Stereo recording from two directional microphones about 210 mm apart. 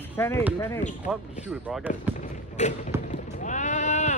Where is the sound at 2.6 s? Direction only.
35° left (ahead or behind).